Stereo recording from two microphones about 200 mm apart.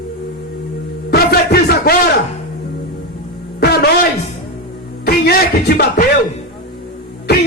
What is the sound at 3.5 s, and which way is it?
Music, 50° left (ahead or behind).